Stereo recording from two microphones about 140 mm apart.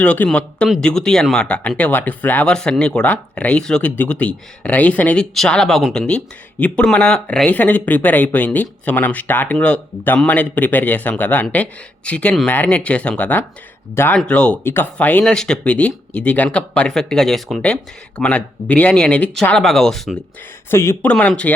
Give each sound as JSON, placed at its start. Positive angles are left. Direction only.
{"t": 0.0, "sound": "speech", "side_deg": 10}
{"t": 20.7, "sound": "speech", "side_deg": 15}